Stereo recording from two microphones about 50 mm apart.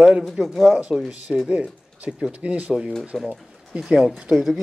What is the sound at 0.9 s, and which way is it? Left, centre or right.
Speech, centre.